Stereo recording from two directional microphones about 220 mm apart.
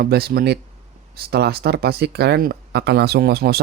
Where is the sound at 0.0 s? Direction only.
45° right (ahead or behind).